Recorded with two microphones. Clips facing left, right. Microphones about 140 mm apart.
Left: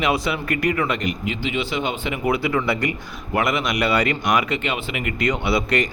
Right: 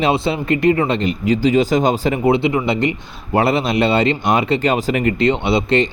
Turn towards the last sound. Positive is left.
turn(degrees=-25)  # may be behind; listen again after turning